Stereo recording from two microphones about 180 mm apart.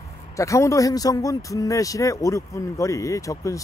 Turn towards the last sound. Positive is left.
turn(degrees=20)  # may be behind; listen again after turning